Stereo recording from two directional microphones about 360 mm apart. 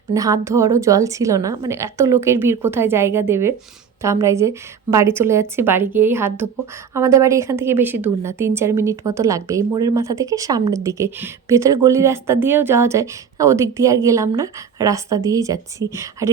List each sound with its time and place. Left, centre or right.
0.1 s a woman's voice: centre